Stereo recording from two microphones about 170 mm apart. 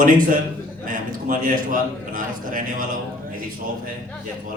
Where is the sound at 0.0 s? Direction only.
55° right (ahead or behind).